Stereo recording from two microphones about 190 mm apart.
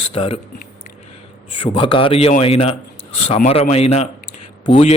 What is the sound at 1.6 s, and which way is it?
A man's voice, 25° left (ahead or behind).